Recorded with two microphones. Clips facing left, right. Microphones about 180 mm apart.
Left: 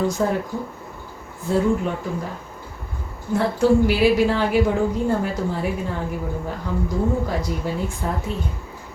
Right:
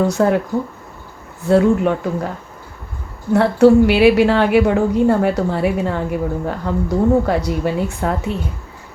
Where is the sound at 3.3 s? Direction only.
70° right (ahead or behind).